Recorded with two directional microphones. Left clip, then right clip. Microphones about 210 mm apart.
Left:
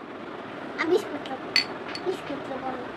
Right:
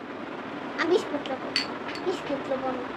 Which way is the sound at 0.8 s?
15° right (ahead or behind).